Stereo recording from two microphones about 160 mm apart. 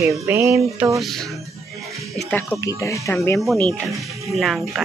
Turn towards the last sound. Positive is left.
turn(degrees=0)  # may be behind; listen again after turning